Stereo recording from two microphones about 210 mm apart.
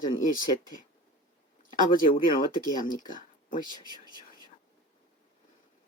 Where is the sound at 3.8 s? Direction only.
20° right (ahead or behind).